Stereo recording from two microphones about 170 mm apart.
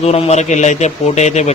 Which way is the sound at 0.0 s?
40° left (ahead or behind).